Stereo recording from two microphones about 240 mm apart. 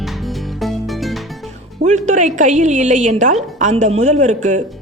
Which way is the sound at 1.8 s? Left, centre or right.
Right.